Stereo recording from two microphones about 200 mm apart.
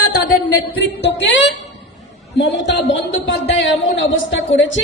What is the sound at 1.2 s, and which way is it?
Speech, 65° left (ahead or behind).